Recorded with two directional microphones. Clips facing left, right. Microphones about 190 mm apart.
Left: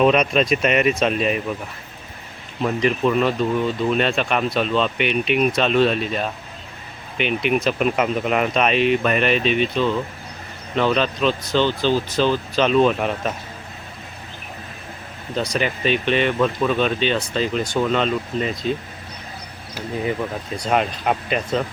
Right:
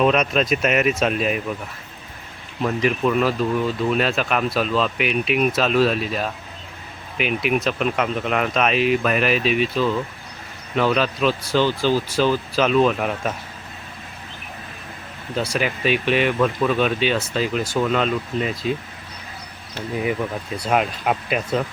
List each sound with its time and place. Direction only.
0.0 s speech: centre (ahead or behind)
2.6 s speech: centre (ahead or behind)
15.4 s speech: 5° right (ahead or behind)
20.6 s speech: 5° right (ahead or behind)